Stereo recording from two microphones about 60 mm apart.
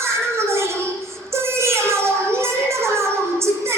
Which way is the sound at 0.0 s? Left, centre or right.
Right.